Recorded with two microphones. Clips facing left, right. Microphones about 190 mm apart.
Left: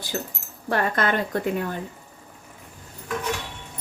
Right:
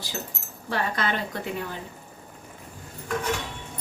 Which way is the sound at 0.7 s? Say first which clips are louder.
Left 4 dB; 50° left (ahead or behind).